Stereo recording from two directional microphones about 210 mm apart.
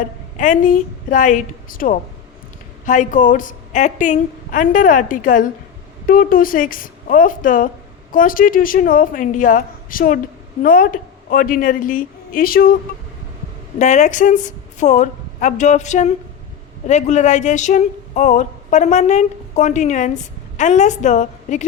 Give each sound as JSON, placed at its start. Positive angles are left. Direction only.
{"t": 0.0, "sound": "a woman's voice", "side_deg": 40}
{"t": 13.7, "sound": "a woman's voice", "side_deg": 35}